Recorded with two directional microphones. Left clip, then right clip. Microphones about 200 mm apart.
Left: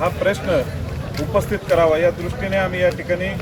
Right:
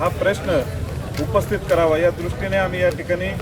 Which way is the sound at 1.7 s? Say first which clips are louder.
Left 1 dB; 5° left (ahead or behind).